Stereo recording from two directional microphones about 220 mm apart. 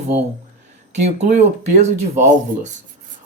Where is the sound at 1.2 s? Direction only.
30° right (ahead or behind).